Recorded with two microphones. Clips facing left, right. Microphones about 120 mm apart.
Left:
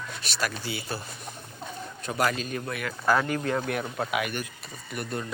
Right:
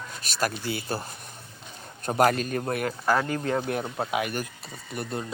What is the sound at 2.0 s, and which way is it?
Speech, 50° right (ahead or behind).